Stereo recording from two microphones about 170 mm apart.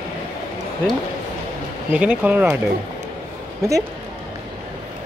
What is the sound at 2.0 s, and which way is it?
Speech, 10° right (ahead or behind).